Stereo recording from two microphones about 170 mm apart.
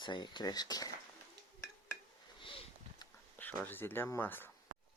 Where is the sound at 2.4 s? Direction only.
30° left (ahead or behind).